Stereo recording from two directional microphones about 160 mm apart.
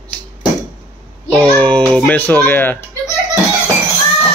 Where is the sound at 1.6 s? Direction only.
5° left (ahead or behind).